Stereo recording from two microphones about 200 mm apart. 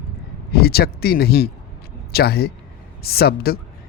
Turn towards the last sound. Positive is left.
turn(degrees=50)  # may be behind; listen again after turning